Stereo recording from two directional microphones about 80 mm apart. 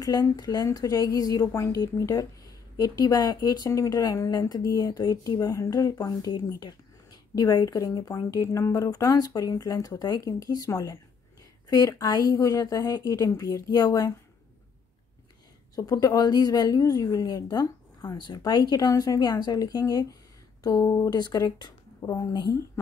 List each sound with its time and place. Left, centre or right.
0.4 s speech: left
15.7 s speech: left